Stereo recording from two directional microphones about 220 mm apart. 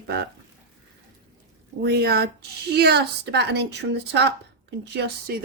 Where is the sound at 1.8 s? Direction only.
45° right (ahead or behind).